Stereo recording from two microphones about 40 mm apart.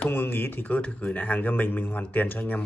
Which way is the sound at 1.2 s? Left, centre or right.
Left.